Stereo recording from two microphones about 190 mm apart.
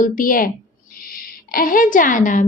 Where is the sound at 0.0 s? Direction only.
45° left (ahead or behind).